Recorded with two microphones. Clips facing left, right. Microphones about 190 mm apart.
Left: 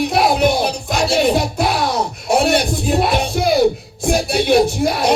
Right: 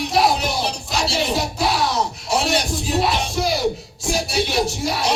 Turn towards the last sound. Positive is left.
turn(degrees=55)  # may be behind; listen again after turning